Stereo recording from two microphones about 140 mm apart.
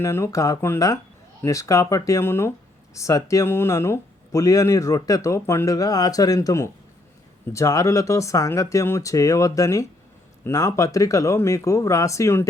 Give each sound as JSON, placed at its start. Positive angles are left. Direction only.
{"t": 0.0, "sound": "speech", "side_deg": 20}